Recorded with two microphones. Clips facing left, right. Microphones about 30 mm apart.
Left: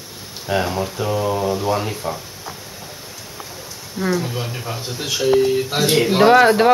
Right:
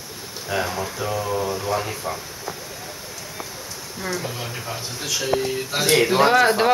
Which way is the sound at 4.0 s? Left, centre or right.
Centre.